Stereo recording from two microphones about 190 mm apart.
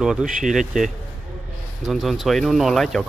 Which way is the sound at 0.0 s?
5° right (ahead or behind).